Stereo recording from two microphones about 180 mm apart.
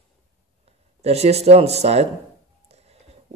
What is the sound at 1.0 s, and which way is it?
A man's voice, 35° right (ahead or behind).